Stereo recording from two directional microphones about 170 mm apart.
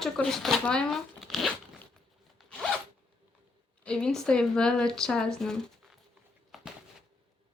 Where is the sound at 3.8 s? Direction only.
5° left (ahead or behind).